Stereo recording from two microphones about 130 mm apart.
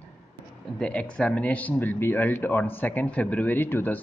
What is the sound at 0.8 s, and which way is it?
Speech, 10° left (ahead or behind).